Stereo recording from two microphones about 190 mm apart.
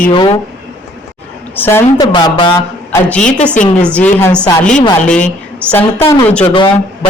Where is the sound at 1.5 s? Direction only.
10° left (ahead or behind).